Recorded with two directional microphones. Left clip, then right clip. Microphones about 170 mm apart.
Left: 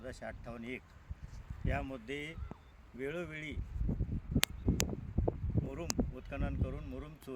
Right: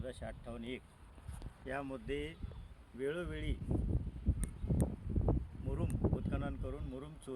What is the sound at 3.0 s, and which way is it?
Speech, 65° left (ahead or behind).